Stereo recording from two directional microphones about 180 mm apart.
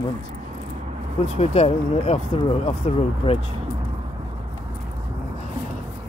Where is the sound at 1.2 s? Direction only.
35° left (ahead or behind).